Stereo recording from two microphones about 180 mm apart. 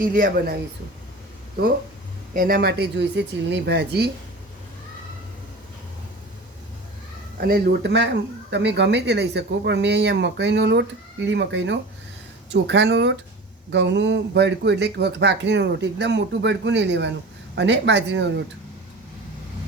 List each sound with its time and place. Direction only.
0.1 s a woman's voice: 50° right (ahead or behind)
2.3 s speech: 50° right (ahead or behind)
7.3 s speech: 55° right (ahead or behind); by 18.3 s 75° right (ahead or behind)